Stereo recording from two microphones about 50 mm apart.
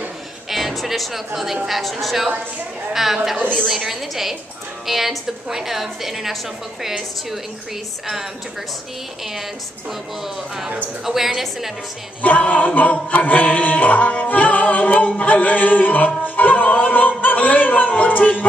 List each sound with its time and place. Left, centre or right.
0.5 s a woman's voice: centre
11.1 s a woman's voice: centre
12.2 s a capella: left
16.3 s music: left